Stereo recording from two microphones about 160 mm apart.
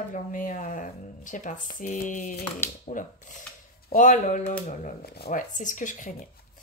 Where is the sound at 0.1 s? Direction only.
55° left (ahead or behind).